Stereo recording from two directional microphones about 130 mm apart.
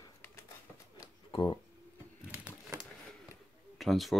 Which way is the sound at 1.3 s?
35° left (ahead or behind).